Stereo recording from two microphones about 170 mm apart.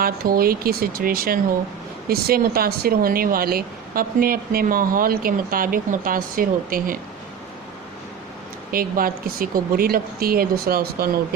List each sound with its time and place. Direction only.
0.0 s speech: 60° right (ahead or behind)
8.7 s speech: 60° right (ahead or behind)